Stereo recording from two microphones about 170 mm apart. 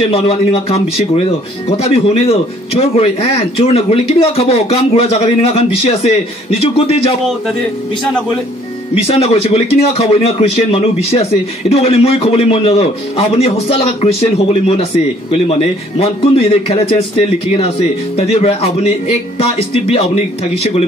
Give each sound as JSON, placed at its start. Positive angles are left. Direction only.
{"t": 0.1, "sound": "speech", "side_deg": 35}
{"t": 9.0, "sound": "speech", "side_deg": 35}
{"t": 18.1, "sound": "speech", "side_deg": 35}